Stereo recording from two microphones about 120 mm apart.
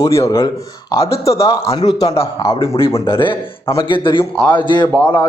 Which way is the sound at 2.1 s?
50° left (ahead or behind).